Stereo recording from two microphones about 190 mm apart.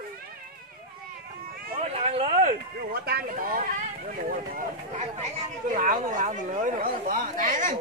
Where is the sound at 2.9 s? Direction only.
55° right (ahead or behind).